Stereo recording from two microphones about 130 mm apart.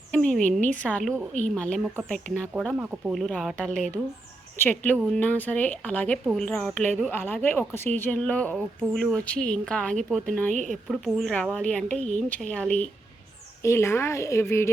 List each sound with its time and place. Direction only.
0.1 s speech: 10° left (ahead or behind)
2.7 s speech: 10° right (ahead or behind)
3.2 s speech: 5° left (ahead or behind)
10.5 s a woman's voice: 70° right (ahead or behind)
10.8 s speech: centre (ahead or behind)
13.6 s a woman's voice: 20° left (ahead or behind)